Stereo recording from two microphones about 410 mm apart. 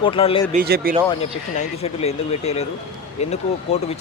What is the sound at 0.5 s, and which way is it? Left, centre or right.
Speech, right.